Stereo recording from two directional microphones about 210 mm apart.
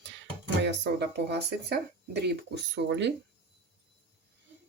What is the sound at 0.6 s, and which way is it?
Speech, 55° right (ahead or behind).